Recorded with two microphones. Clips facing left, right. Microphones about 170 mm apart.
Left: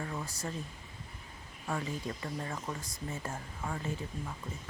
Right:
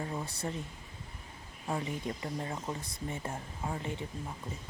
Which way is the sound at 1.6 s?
20° right (ahead or behind).